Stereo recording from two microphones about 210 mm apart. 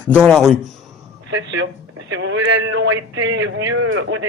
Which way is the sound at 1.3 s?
65° right (ahead or behind).